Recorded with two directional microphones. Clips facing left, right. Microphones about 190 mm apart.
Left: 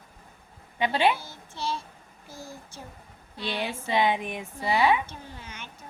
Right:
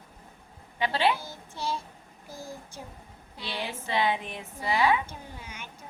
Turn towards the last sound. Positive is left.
turn(degrees=-10)  # may be behind; listen again after turning